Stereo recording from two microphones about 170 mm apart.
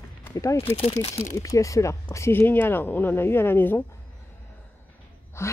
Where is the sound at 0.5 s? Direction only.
35° left (ahead or behind).